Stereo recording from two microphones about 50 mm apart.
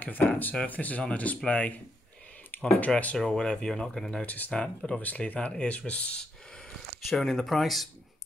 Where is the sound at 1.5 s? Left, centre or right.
Left.